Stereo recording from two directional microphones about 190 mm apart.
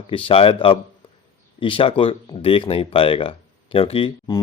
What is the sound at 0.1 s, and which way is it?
Speech, 30° left (ahead or behind).